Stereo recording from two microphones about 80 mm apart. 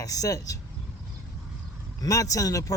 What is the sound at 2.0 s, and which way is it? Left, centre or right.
Speech, left.